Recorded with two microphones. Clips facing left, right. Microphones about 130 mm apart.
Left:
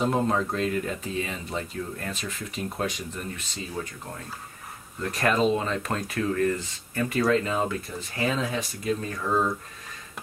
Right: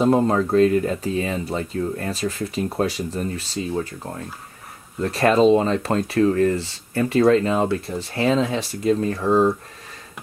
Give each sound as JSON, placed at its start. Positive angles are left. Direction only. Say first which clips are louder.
{"t": 0.0, "sound": "speech", "louder": "right 7 dB", "side_deg": -40}
{"t": 5.1, "sound": "speech", "louder": "right 8 dB", "side_deg": -30}